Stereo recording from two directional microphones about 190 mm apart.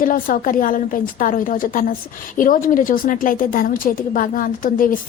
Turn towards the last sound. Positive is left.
turn(degrees=45)  # may be behind; listen again after turning